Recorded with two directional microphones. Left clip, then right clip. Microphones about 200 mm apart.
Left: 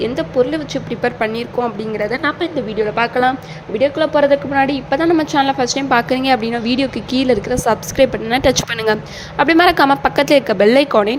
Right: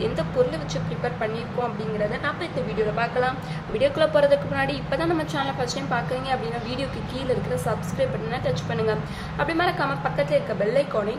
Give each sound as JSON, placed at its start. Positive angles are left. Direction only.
{"t": 0.0, "sound": "a woman's voice", "side_deg": 40}
{"t": 2.9, "sound": "a woman's voice", "side_deg": 45}
{"t": 3.8, "sound": "a woman's voice", "side_deg": 30}